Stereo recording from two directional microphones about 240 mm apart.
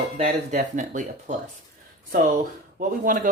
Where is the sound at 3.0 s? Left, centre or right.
Right.